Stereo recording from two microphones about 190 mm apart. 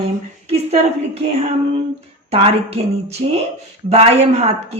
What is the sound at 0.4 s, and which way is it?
A woman's voice, 35° right (ahead or behind).